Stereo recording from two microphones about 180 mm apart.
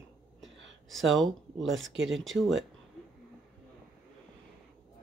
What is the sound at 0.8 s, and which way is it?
Speech, centre (ahead or behind).